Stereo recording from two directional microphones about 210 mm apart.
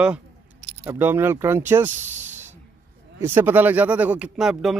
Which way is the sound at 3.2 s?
10° right (ahead or behind).